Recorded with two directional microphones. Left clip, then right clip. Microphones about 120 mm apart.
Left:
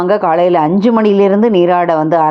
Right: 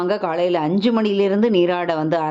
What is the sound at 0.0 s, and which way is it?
A woman's voice, 35° left (ahead or behind).